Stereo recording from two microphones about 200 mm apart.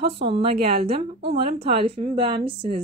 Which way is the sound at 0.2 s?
30° right (ahead or behind).